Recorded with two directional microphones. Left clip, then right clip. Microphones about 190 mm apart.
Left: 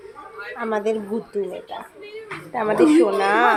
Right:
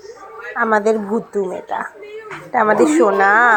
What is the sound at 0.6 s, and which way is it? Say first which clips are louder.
Speech: right 8 dB; 15° right (ahead or behind).